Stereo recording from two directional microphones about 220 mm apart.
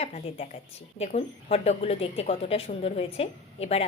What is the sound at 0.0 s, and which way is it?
A woman's voice, 30° left (ahead or behind).